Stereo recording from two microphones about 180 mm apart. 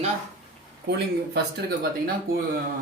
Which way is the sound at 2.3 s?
50° right (ahead or behind).